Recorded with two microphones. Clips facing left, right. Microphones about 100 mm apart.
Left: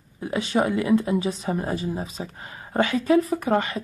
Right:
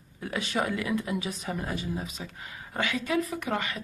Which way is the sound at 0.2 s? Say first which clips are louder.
Left 7 dB; 25° left (ahead or behind).